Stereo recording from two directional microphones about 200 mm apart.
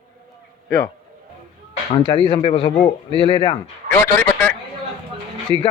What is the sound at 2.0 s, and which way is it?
Speech, 25° left (ahead or behind).